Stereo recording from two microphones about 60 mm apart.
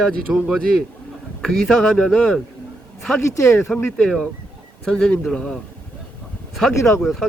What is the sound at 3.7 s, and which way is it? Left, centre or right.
Speech, left.